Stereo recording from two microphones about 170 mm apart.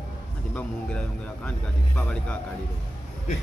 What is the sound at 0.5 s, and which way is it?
Speech, 10° left (ahead or behind).